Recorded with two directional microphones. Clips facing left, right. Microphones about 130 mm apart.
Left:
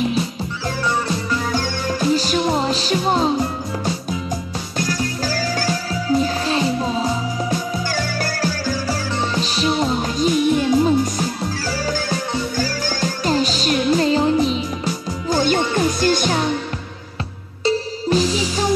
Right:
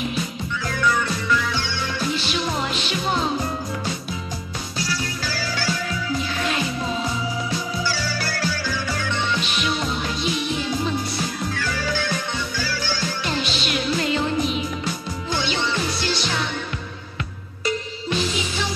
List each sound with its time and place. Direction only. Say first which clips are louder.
0.7 s music: left 1 dB; 30° left (ahead or behind)
4.7 s music: left 6 dB; 45° left (ahead or behind)
7.4 s music: left 3 dB; 50° left (ahead or behind)
11.5 s music: left 3 dB; 35° left (ahead or behind)
17.6 s music: left 7 dB; 35° left (ahead or behind)